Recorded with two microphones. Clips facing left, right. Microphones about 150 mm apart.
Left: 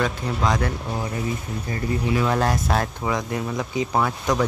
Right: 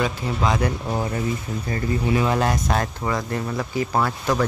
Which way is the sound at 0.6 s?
20° right (ahead or behind).